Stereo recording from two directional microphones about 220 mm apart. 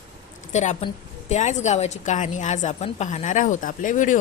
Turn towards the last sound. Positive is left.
turn(degrees=35)  # may be behind; listen again after turning